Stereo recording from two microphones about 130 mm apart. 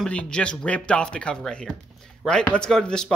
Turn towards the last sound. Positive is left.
turn(degrees=5)  # may be behind; listen again after turning